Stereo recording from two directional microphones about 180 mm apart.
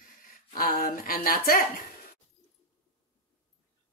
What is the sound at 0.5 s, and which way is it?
Speech, 55° left (ahead or behind).